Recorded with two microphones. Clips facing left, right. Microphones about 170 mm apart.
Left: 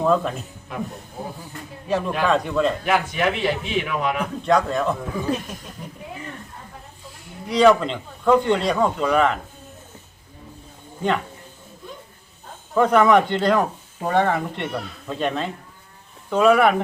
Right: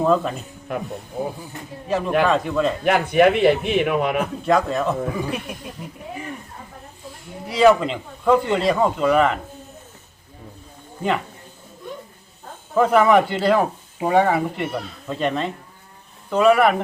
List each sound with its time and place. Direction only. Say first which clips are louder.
0.0 s speech: right 1 dB; centre (ahead or behind)
1.9 s speech: right 2 dB; centre (ahead or behind)
2.8 s speech: right 6 dB; 55° right (ahead or behind)
4.4 s speech: left 1 dB; centre (ahead or behind)
7.4 s speech: right 1 dB; 5° right (ahead or behind)
12.7 s speech: even; 5° right (ahead or behind)